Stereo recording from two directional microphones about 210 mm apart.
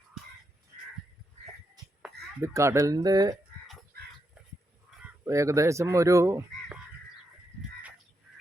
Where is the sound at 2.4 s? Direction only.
15° right (ahead or behind).